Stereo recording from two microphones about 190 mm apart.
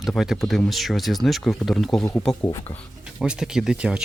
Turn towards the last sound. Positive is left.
turn(degrees=-5)  # may be behind; listen again after turning